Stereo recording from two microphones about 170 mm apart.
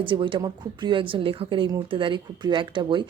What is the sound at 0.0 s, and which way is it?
Speech, 30° right (ahead or behind).